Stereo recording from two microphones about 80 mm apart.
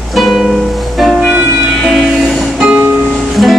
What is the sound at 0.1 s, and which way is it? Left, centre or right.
Music, centre.